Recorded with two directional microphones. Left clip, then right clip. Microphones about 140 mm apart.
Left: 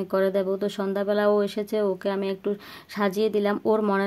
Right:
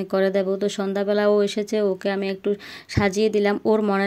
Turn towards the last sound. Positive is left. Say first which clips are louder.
# right 2 dB
turn(degrees=-15)  # may be behind; listen again after turning